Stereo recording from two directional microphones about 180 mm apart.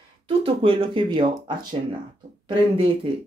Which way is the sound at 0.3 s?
30° right (ahead or behind).